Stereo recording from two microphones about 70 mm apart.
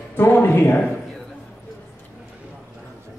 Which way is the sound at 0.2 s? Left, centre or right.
Left.